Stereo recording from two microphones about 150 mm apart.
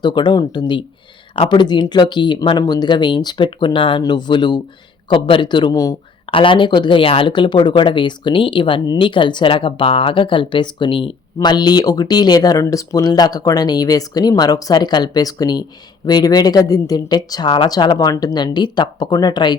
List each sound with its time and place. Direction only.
0.0 s speech: 30° left (ahead or behind)
6.3 s speech: 35° left (ahead or behind)